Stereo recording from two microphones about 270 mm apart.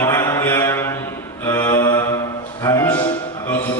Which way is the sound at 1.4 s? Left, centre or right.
Centre.